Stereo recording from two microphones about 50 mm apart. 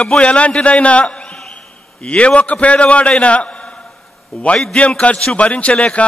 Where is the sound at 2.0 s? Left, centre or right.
Left.